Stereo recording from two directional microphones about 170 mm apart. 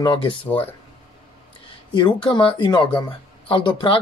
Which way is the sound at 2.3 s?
30° left (ahead or behind).